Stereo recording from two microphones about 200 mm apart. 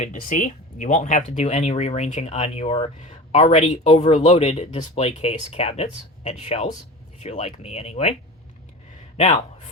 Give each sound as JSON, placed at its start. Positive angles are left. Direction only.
{"t": 0.0, "sound": "speech", "side_deg": 40}
{"t": 9.1, "sound": "a man's voice", "side_deg": 35}